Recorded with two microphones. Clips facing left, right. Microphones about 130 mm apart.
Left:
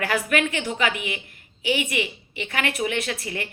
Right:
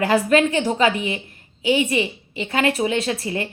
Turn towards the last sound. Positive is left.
turn(degrees=-25)  # may be behind; listen again after turning